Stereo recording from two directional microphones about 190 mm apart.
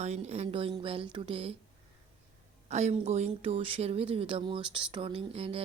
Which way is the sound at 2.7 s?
35° right (ahead or behind).